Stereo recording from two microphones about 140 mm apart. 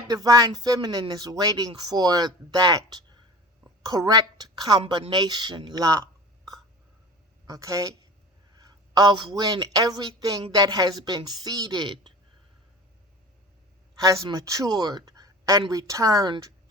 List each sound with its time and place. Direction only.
0.1 s a woman's voice: 25° right (ahead or behind)
14.0 s speech: 25° right (ahead or behind)